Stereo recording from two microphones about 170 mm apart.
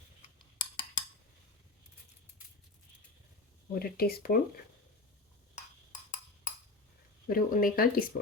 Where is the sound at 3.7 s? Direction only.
65° left (ahead or behind).